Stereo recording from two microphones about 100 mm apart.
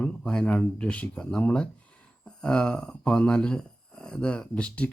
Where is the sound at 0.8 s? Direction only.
15° left (ahead or behind).